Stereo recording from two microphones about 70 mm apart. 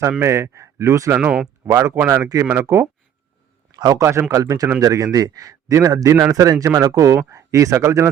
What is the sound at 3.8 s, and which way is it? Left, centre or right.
Speech, right.